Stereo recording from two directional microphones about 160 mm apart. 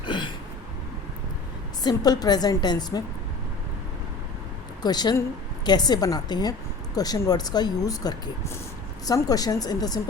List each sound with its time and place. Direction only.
0.0 s a sound: 30° left (ahead or behind)
1.8 s speech: 25° left (ahead or behind)
4.8 s speech: 25° left (ahead or behind)